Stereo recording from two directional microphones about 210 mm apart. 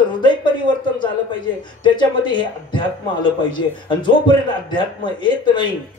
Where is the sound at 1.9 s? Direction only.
20° left (ahead or behind).